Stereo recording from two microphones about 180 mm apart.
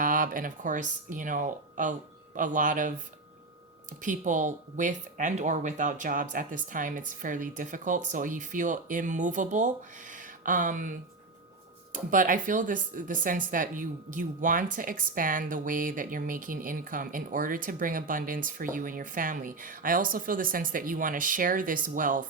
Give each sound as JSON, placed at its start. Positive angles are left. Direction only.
{"t": 0.0, "sound": "speech", "side_deg": -50}
{"t": 4.0, "sound": "speech", "side_deg": -45}